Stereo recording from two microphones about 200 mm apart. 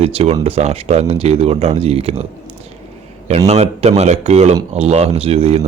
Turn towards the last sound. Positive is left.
turn(degrees=-30)  # may be behind; listen again after turning